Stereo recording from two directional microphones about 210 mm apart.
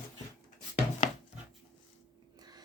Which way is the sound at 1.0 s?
35° left (ahead or behind).